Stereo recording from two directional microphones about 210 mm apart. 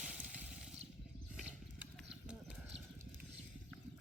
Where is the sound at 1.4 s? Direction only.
5° right (ahead or behind).